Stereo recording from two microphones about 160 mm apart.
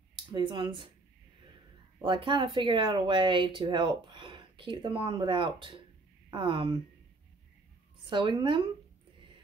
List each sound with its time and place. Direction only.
0.1 s speech: 30° right (ahead or behind)
2.0 s speech: 30° right (ahead or behind)
8.0 s speech: 30° right (ahead or behind)